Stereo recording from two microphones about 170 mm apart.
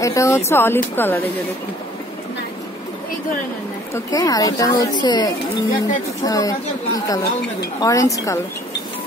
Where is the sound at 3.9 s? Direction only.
20° left (ahead or behind).